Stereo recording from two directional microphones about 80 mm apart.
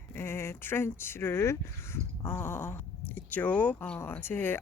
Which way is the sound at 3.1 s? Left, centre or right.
Centre.